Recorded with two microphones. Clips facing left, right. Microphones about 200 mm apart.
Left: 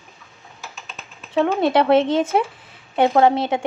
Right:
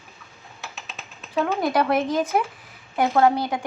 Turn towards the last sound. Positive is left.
turn(degrees=25)  # may be behind; listen again after turning